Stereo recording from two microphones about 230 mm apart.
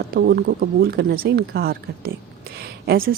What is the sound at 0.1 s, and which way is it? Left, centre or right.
Speech, right.